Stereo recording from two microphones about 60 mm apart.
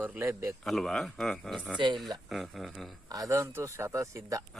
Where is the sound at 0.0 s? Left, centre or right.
Right.